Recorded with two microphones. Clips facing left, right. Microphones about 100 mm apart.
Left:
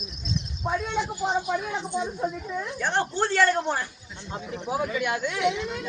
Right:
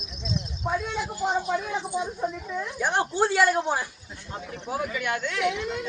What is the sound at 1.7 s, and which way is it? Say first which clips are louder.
A woman's voice: even; 10° right (ahead or behind).